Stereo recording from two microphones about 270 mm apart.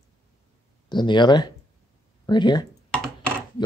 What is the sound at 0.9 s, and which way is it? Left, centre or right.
Speech, centre.